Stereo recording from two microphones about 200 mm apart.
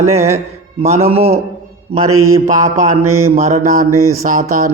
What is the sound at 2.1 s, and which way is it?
Mantra, 90° right.